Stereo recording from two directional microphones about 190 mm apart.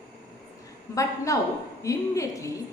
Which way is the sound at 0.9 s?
15° left (ahead or behind).